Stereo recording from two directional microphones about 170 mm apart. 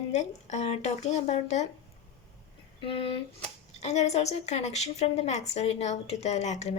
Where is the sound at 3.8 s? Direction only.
40° left (ahead or behind).